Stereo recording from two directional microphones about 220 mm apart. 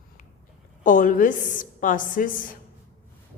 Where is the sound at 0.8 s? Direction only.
35° left (ahead or behind).